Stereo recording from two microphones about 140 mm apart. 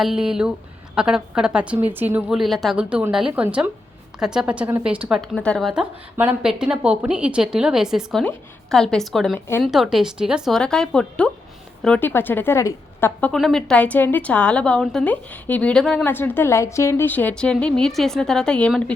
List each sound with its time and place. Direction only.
0.0 s a woman's voice: 5° right (ahead or behind)
2.3 s a woman's voice: centre (ahead or behind)
6.1 s a woman's voice: 10° right (ahead or behind); by 13.3 s 15° left (ahead or behind)
13.3 s a woman's voice: 5° left (ahead or behind)
16.0 s a woman's voice: 15° left (ahead or behind)